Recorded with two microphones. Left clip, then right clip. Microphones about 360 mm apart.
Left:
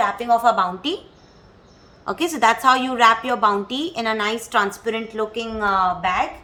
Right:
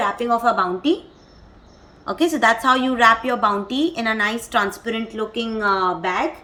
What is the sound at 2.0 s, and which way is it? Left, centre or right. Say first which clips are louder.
A woman's voice: right 1 dB; left.